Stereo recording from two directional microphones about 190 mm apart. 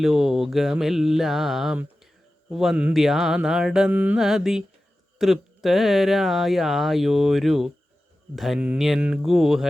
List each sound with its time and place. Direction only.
0.0 s speech: centre (ahead or behind)